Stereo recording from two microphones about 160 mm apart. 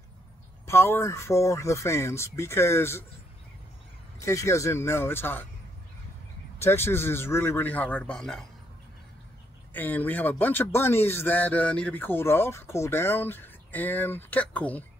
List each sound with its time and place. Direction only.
0.7 s speech: 15° left (ahead or behind)
4.2 s speech: 20° left (ahead or behind)
6.6 s speech: 15° left (ahead or behind)
9.8 s speech: 10° left (ahead or behind)